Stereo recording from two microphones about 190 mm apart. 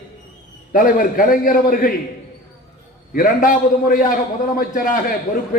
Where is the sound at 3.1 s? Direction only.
45° left (ahead or behind).